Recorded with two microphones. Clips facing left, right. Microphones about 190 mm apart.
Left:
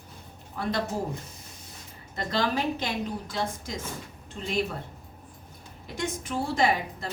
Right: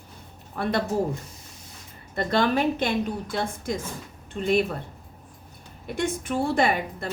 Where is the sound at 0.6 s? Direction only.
60° right (ahead or behind).